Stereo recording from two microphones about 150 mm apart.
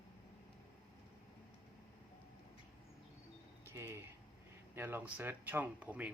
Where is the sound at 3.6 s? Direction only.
15° right (ahead or behind).